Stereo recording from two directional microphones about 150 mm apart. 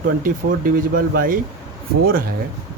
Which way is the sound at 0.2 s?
70° right (ahead or behind).